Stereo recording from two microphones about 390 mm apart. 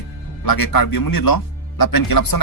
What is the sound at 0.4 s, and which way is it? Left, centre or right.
Speech, left.